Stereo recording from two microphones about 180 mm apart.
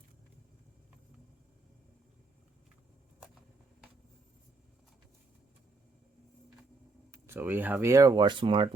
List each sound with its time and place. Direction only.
7.1 s speech: 10° right (ahead or behind); by 8.7 s 30° right (ahead or behind)